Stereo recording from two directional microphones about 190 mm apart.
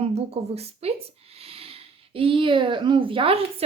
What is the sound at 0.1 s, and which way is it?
Speech, 30° right (ahead or behind).